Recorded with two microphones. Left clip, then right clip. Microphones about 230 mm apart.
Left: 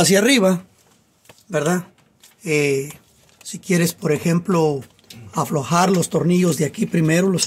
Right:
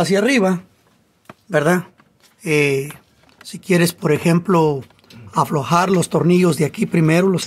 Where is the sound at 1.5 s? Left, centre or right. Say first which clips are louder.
Right 4 dB; right.